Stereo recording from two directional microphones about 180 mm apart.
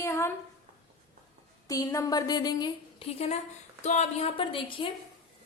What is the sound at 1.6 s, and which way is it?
A woman's voice, 20° left (ahead or behind).